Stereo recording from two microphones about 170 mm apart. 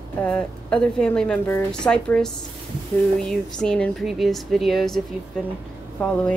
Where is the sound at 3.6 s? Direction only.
5° left (ahead or behind).